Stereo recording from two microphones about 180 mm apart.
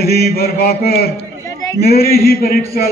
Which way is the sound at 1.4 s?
15° left (ahead or behind).